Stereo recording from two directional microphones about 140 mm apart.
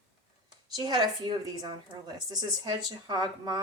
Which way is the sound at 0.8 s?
30° right (ahead or behind).